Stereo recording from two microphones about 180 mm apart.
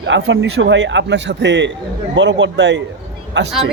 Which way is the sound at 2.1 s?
85° right.